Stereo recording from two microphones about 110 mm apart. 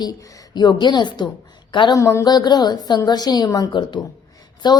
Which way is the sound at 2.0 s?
30° left (ahead or behind).